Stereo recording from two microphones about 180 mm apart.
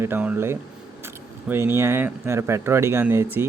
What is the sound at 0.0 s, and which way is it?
Speech, 10° right (ahead or behind).